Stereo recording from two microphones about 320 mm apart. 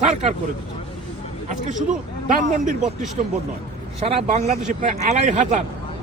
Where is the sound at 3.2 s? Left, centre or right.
Centre.